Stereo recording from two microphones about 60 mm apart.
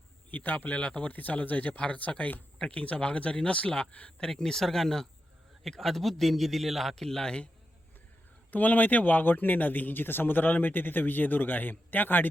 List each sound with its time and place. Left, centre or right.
0.3 s a man's voice: left; by 7.4 s centre
8.4 s speech: left